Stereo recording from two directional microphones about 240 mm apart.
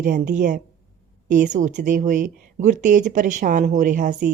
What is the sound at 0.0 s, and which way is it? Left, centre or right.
A woman's voice, right.